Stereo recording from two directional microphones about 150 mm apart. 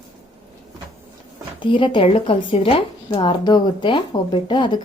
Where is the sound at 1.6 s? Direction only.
35° left (ahead or behind).